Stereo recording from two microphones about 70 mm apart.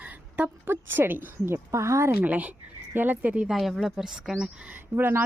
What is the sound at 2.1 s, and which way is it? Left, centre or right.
Speech, right.